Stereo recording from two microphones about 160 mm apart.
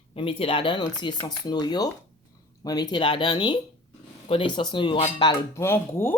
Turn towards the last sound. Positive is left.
turn(degrees=15)  # may be behind; listen again after turning